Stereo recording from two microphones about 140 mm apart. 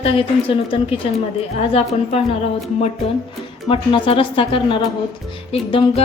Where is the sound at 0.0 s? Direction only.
40° left (ahead or behind).